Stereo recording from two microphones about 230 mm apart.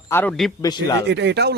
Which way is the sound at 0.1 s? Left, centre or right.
Centre.